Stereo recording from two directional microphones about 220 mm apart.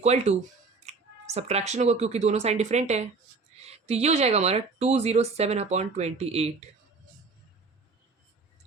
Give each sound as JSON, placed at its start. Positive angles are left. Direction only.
{"t": 0.0, "sound": "speech", "side_deg": -30}
{"t": 3.5, "sound": "music", "side_deg": -30}
{"t": 3.8, "sound": "speech", "side_deg": -30}